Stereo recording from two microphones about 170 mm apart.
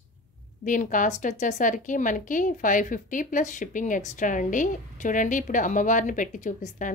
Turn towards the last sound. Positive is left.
turn(degrees=45)  # may be behind; listen again after turning